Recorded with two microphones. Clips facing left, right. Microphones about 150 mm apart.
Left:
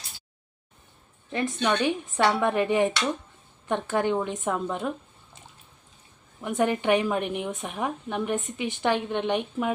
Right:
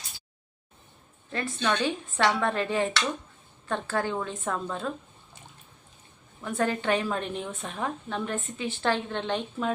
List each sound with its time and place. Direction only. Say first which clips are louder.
1.6 s a woman's voice: left 2 dB; 15° left (ahead or behind)
6.4 s a woman's voice: left 3 dB; 15° left (ahead or behind)